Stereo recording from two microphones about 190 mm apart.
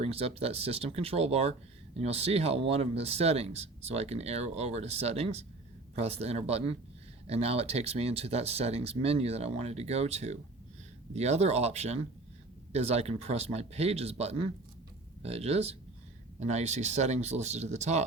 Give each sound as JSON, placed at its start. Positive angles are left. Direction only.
{"t": 0.0, "sound": "speech", "side_deg": -30}